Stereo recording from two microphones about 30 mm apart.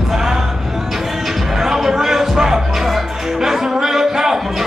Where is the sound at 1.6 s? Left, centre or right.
Centre.